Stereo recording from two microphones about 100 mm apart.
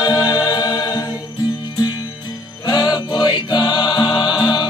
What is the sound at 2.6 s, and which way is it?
Music, 40° left (ahead or behind).